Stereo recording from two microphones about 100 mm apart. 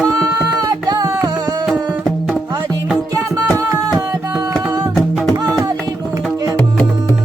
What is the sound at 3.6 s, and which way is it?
Music, 35° right (ahead or behind).